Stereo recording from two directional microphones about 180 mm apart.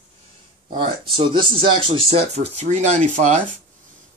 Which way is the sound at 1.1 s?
30° right (ahead or behind).